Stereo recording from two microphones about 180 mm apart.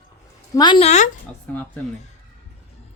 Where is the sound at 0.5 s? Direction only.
25° left (ahead or behind).